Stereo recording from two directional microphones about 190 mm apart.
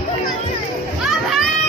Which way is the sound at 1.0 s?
Centre (ahead or behind).